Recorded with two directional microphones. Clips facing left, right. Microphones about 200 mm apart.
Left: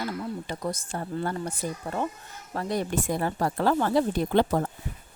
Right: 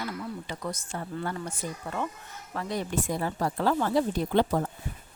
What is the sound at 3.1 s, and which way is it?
Speech, 55° left (ahead or behind).